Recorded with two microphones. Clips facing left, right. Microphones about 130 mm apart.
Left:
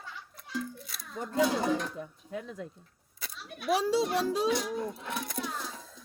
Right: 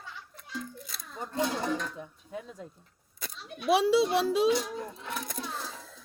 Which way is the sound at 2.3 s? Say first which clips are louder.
Left 2 dB; 70° left (ahead or behind).